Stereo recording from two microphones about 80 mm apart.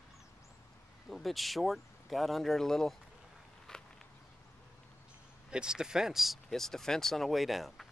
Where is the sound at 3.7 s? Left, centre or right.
Centre.